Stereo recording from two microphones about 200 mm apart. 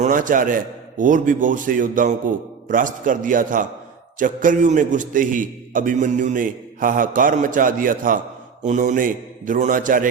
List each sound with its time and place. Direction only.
0.0 s a man's voice: 40° right (ahead or behind)